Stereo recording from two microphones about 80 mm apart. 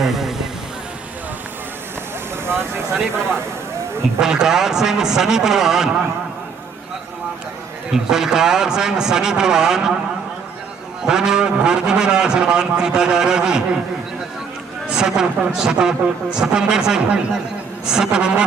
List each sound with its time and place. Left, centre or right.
0.0 s speech: centre
2.5 s speech: right
4.2 s speech: centre
7.9 s speech: centre
11.0 s speech: centre
14.8 s speech: centre